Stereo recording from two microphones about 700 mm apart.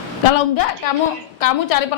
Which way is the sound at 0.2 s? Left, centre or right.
Left.